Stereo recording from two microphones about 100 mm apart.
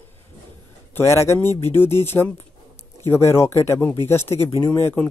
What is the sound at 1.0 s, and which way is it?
A man's voice, 30° left (ahead or behind).